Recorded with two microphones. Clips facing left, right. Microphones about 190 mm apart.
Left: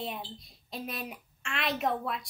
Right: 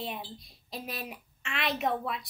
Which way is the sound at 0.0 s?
Centre (ahead or behind).